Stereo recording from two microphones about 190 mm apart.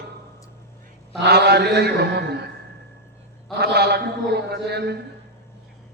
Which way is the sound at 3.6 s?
55° right (ahead or behind).